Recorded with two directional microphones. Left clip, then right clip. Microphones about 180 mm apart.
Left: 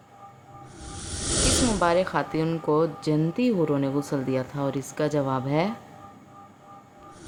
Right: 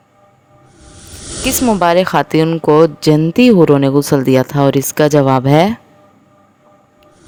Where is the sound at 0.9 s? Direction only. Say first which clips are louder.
Even; centre (ahead or behind).